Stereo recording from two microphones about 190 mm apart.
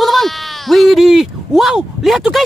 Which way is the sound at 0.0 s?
Centre (ahead or behind).